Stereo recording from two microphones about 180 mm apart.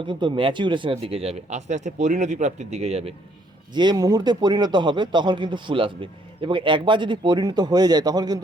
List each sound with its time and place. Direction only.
0.0 s speech: 25° right (ahead or behind)
3.8 s a man's voice: 25° right (ahead or behind)